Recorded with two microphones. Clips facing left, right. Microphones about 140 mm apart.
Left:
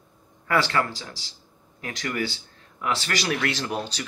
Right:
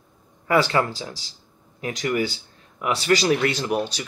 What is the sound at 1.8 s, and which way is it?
Speech, 20° right (ahead or behind).